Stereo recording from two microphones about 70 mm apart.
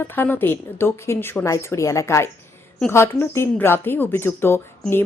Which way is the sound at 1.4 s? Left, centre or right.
Left.